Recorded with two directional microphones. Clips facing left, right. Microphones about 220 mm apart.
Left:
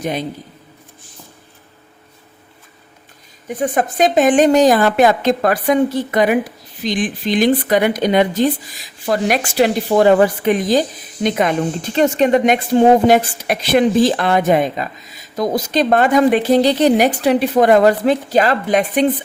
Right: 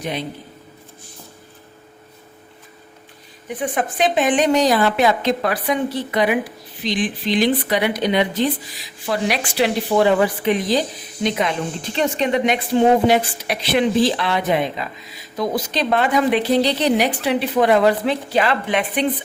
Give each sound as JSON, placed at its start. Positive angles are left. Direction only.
{"t": 0.0, "sound": "a woman's voice", "side_deg": 45}
{"t": 3.5, "sound": "a woman's voice", "side_deg": 45}